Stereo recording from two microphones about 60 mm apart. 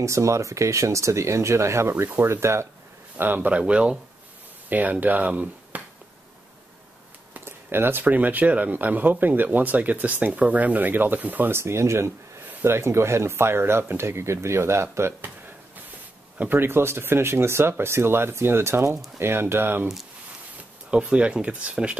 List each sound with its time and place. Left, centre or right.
0.0 s speech: right
3.2 s speech: right
7.3 s speech: right
11.5 s speech: right
12.4 s speech: right
16.3 s speech: right
20.9 s speech: centre